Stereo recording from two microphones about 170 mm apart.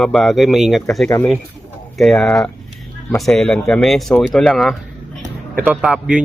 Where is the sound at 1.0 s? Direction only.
15° left (ahead or behind).